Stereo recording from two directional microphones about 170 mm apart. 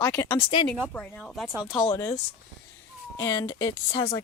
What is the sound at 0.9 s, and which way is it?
Speech, centre (ahead or behind).